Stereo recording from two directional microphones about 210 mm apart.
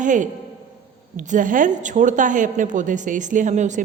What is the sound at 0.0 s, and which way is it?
A man's voice, 35° right (ahead or behind).